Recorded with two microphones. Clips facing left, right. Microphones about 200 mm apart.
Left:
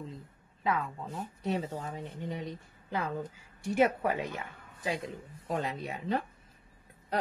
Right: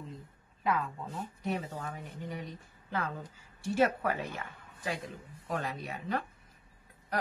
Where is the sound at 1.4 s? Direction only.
20° left (ahead or behind).